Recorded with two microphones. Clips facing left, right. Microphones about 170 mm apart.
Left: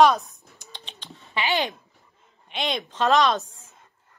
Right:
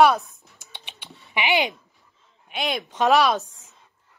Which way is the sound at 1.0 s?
15° right (ahead or behind).